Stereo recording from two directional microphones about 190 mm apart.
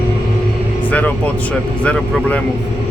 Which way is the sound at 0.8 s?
10° left (ahead or behind).